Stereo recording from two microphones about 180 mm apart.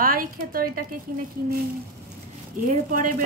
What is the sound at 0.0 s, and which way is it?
Speech, 55° right (ahead or behind).